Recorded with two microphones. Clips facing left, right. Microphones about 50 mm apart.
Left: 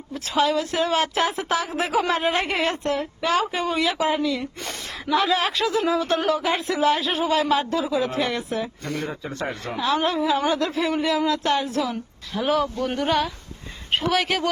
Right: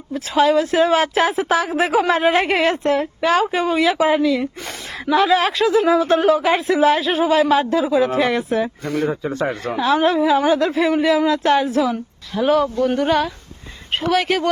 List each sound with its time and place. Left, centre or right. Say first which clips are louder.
0.1 s speech: right 6 dB; right
1.3 s speech: right 6 dB; centre
2.6 s speech: right 6 dB; right
4.2 s speech: right 7 dB; centre
6.3 s speech: right 7 dB; right
6.8 s speech: right 4 dB; centre
7.4 s speech: right 5 dB; centre
7.7 s speech: right 7 dB; right
8.8 s speech: right 7 dB; centre
9.4 s speech: right 4 dB; centre
11.9 s a woman's voice: right 6 dB; centre